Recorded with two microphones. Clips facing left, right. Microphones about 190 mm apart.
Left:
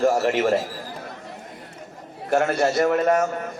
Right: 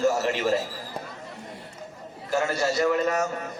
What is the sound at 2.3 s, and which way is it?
Speech, 60° left (ahead or behind).